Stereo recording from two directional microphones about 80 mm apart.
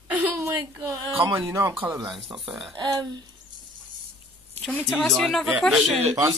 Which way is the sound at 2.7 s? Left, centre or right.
Right.